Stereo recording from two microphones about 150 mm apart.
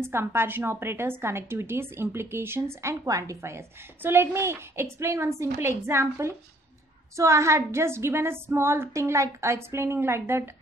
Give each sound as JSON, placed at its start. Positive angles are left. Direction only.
{"t": 0.0, "sound": "a woman's voice", "side_deg": -15}